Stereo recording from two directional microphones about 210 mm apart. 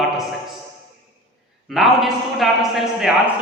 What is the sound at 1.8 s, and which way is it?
A man's voice, centre (ahead or behind).